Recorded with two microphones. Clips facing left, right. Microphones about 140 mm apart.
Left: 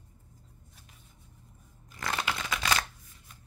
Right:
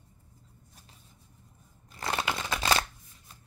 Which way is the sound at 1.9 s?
30° right (ahead or behind).